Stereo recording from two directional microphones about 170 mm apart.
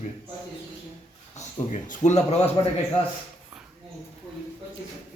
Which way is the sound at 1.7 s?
45° left (ahead or behind).